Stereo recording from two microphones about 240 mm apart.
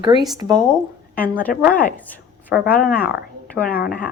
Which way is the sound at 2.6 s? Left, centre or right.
Left.